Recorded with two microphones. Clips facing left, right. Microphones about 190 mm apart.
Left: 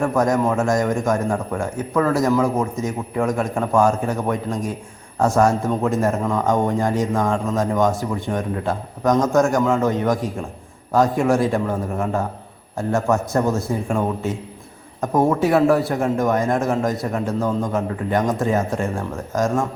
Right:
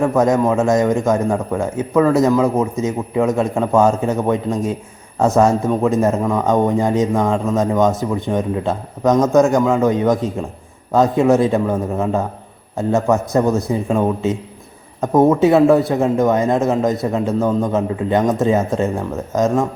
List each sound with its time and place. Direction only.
0.0 s a man's voice: 20° right (ahead or behind)
15.1 s a man's voice: 20° right (ahead or behind)